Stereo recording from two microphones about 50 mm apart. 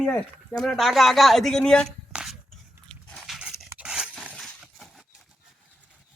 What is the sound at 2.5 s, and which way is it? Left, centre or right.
Dog, centre.